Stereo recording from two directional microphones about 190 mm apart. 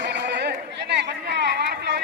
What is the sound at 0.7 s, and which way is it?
Chatter, 60° right (ahead or behind).